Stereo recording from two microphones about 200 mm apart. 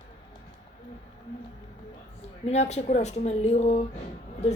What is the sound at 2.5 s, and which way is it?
Speech, 35° left (ahead or behind).